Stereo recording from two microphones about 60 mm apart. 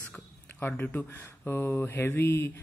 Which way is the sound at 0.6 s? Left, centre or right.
Left.